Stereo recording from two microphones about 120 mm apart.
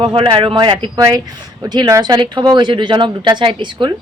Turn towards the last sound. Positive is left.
turn(degrees=-40)  # may be behind; listen again after turning